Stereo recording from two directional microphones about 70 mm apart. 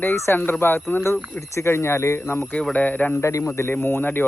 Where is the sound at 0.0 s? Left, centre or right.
Left.